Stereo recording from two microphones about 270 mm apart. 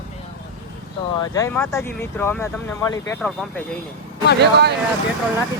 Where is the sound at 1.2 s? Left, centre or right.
Centre.